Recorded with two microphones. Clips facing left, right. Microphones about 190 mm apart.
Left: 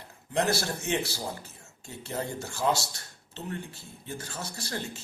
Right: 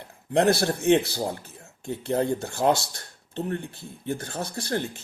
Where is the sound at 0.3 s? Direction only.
55° right (ahead or behind).